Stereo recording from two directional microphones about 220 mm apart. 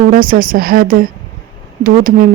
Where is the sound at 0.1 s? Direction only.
40° right (ahead or behind).